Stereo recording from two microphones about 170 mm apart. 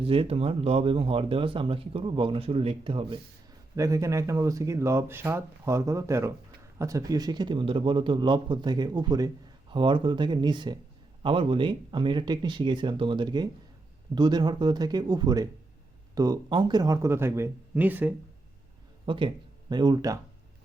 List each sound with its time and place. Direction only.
0.0 s speech: 35° right (ahead or behind)
3.8 s a man's voice: 20° right (ahead or behind)
19.0 s a man's voice: 30° right (ahead or behind)